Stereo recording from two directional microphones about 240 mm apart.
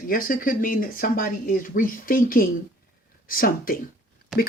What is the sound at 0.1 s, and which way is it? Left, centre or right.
Speech, left.